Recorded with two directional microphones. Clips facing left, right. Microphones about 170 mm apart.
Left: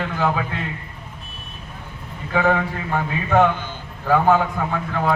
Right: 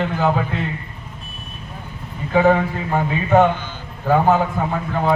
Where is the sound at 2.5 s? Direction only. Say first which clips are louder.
Right 3 dB; 15° right (ahead or behind).